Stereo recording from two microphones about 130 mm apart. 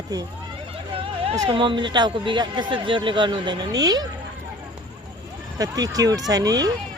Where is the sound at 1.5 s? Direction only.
40° right (ahead or behind).